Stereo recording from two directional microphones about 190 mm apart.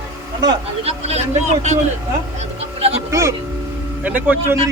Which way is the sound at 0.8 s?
35° right (ahead or behind).